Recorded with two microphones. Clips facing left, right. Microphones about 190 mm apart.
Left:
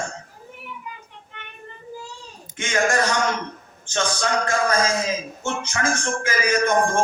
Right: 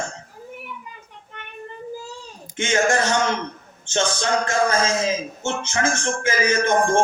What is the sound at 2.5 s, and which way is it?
A man's voice, 25° right (ahead or behind).